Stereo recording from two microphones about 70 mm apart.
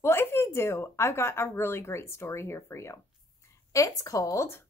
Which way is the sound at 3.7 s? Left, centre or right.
Left.